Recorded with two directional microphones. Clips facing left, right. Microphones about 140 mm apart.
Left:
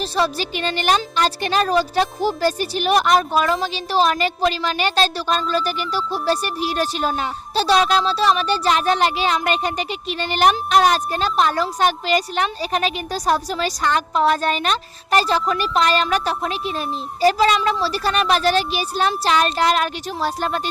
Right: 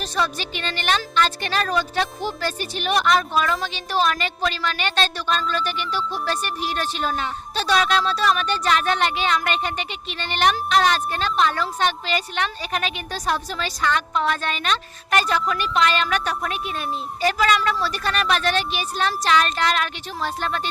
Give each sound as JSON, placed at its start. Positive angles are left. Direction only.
{"t": 0.0, "sound": "speech", "side_deg": 35}
{"t": 6.0, "sound": "speech", "side_deg": 5}
{"t": 6.2, "sound": "speech", "side_deg": 35}